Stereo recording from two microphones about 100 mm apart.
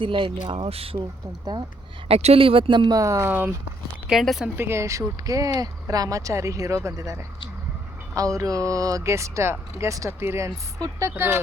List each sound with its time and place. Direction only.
0.0 s speech: 60° right (ahead or behind); by 0.9 s 75° right (ahead or behind)
2.0 s speech: 85° right; by 3.0 s 50° right (ahead or behind)
3.0 s speech: 30° right (ahead or behind)
3.2 s speech: 20° right (ahead or behind)
4.1 s speech: centre (ahead or behind)
4.5 s speech: 25° right (ahead or behind)
11.1 s speech: 20° right (ahead or behind)